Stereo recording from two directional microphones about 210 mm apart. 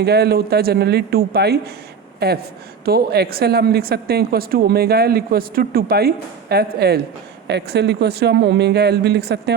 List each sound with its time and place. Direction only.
0.0 s speech: 50° right (ahead or behind)